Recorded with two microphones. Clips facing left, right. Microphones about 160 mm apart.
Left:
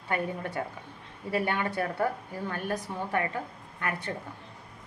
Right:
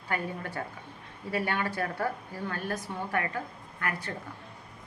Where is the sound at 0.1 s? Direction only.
25° left (ahead or behind).